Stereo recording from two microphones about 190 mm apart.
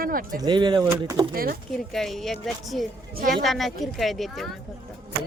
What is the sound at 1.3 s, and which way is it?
Speech, 50° right (ahead or behind).